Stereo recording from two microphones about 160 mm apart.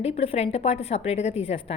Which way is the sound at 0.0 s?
40° left (ahead or behind).